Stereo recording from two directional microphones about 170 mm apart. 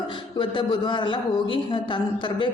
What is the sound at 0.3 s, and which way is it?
A man's voice, 30° left (ahead or behind).